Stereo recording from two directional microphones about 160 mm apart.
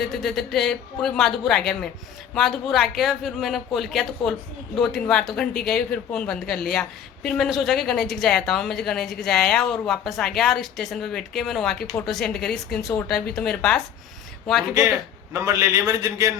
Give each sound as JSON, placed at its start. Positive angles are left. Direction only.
{"t": 0.1, "sound": "speech", "side_deg": 0}
{"t": 15.3, "sound": "a man's voice", "side_deg": -20}